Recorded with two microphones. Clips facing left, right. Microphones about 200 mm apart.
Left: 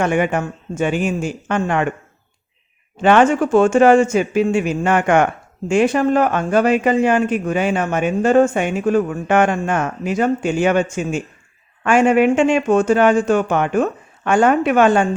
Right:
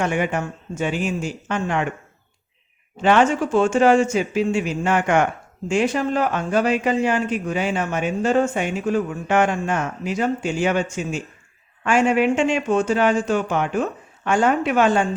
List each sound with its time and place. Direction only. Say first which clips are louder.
0.0 s speech: left 4 dB; 55° left (ahead or behind)
3.0 s speech: left 4 dB; 55° left (ahead or behind)